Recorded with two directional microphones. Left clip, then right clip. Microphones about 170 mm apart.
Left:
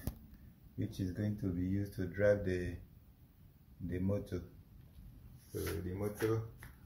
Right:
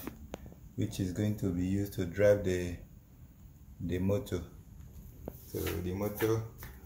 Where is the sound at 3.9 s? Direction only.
20° right (ahead or behind).